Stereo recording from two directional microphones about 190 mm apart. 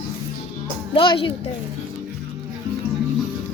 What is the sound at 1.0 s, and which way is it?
Speech, 25° left (ahead or behind).